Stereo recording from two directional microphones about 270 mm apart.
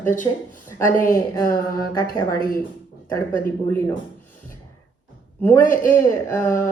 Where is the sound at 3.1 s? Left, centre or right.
Centre.